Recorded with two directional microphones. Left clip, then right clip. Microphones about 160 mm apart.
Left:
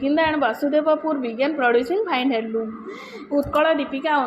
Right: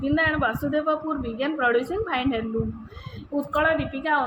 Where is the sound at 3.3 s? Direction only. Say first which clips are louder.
Left 4 dB; 45° left (ahead or behind).